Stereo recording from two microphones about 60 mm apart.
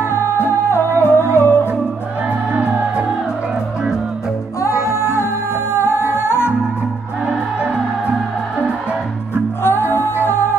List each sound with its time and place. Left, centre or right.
0.1 s music: left
2.5 s music: right
4.6 s music: left
9.6 s music: left